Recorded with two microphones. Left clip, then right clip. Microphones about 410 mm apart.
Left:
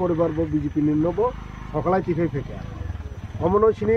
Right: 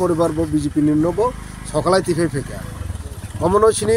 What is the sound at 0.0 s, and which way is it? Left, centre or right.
Speech, left.